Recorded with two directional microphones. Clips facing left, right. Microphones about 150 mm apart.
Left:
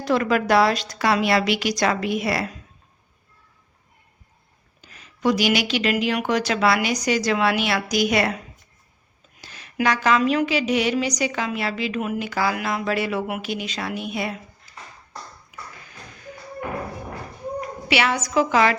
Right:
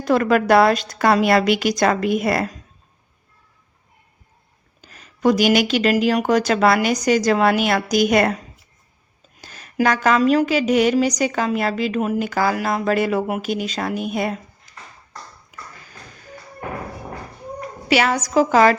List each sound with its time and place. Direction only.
0.0 s a woman's voice: 50° right (ahead or behind)
4.8 s a woman's voice: 40° right (ahead or behind)
9.4 s a woman's voice: 45° right (ahead or behind)
17.8 s a woman's voice: 40° right (ahead or behind)